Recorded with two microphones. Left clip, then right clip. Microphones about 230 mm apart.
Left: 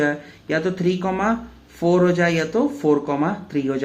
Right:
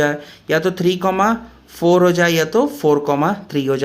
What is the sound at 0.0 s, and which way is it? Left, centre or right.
Speech, right.